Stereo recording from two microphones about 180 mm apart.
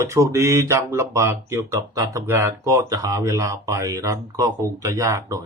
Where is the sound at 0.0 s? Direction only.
15° right (ahead or behind).